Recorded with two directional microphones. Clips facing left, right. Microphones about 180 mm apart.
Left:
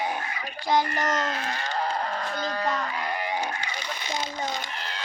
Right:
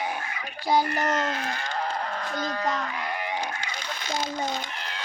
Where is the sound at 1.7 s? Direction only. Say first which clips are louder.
Left 3 dB; 35° left (ahead or behind).